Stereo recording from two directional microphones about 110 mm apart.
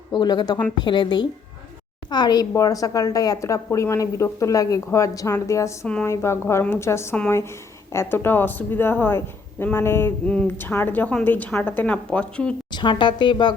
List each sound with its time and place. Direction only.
0.1 s a woman's voice: 40° left (ahead or behind); by 12.5 s 10° left (ahead or behind)
12.7 s a woman's voice: 45° left (ahead or behind)